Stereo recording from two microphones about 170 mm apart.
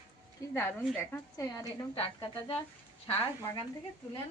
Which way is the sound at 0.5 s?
10° left (ahead or behind).